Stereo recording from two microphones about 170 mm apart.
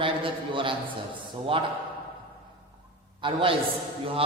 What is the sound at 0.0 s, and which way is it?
Speech, 30° right (ahead or behind).